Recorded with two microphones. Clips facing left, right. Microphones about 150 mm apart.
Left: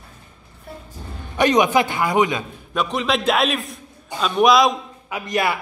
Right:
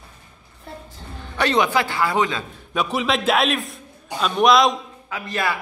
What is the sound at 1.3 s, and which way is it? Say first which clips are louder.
A man's voice: left 3 dB; 15° left (ahead or behind).